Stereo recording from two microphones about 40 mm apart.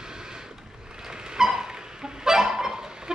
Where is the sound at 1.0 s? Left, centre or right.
Centre.